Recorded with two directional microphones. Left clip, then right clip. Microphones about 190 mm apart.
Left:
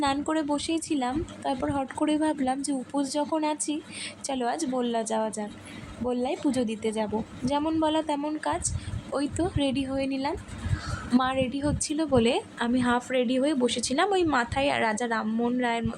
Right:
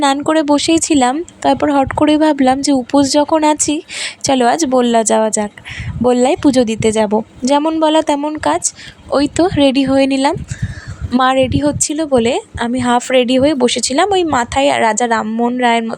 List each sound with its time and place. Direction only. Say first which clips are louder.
0.0 s a woman's voice: right 14 dB; 45° right (ahead or behind)